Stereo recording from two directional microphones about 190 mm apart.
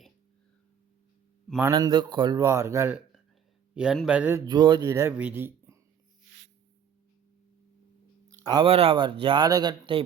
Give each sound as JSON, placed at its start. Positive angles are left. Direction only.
{"t": 1.6, "sound": "speech", "side_deg": -20}
{"t": 4.4, "sound": "speech", "side_deg": -25}
{"t": 8.4, "sound": "speech", "side_deg": -25}